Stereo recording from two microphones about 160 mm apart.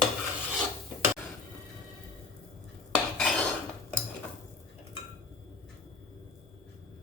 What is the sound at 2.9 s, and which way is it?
Cutlery, 5° left (ahead or behind).